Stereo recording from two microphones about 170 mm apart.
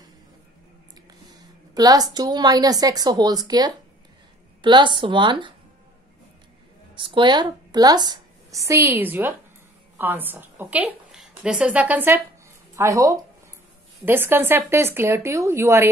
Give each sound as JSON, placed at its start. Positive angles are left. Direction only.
{"t": 1.3, "sound": "a woman's voice", "side_deg": -20}
{"t": 7.0, "sound": "a woman's voice", "side_deg": -25}